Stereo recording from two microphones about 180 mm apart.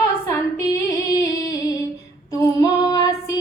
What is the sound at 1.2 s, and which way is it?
Music, 20° left (ahead or behind).